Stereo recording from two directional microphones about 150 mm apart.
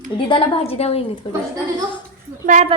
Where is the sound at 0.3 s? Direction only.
35° left (ahead or behind).